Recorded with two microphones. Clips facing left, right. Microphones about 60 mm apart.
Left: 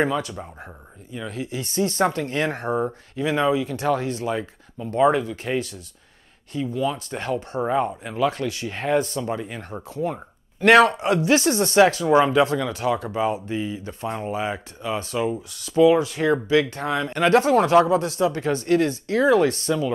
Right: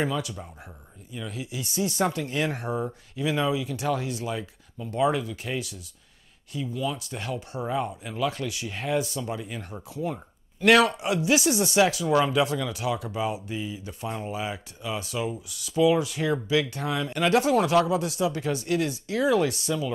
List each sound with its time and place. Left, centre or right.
0.0 s speech: left
7.1 s speech: left
7.6 s speech: left
8.3 s speech: left
9.2 s speech: left
9.8 s speech: left